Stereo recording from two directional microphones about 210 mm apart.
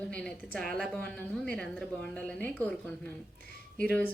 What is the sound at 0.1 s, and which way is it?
A woman's voice, 5° left (ahead or behind).